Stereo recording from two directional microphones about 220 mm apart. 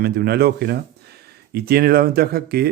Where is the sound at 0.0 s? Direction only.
45° right (ahead or behind).